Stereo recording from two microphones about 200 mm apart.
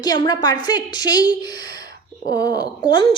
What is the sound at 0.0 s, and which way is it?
A woman's voice, 20° left (ahead or behind).